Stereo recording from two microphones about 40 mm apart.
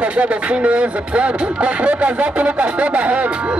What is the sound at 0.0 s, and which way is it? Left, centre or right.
Speech, right.